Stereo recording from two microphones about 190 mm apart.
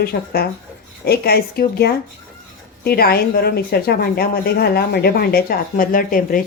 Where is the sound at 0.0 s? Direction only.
55° left (ahead or behind).